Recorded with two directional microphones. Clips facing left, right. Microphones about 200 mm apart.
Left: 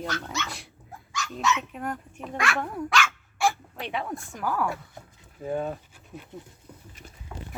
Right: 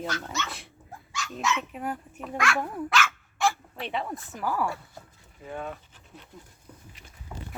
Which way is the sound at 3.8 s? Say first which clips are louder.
Even; centre (ahead or behind).